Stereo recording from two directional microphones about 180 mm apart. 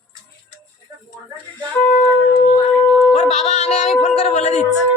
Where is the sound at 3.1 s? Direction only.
40° left (ahead or behind).